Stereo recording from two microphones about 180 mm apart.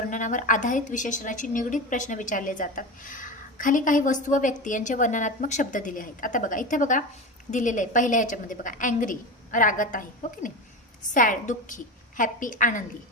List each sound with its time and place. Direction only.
0.1 s a woman's voice: 45° left (ahead or behind)
11.1 s a woman's voice: 45° left (ahead or behind)